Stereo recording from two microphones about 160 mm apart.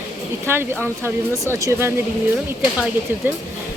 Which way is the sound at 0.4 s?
15° right (ahead or behind).